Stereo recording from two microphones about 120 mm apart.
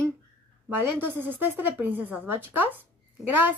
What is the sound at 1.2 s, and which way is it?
Speech, 15° right (ahead or behind).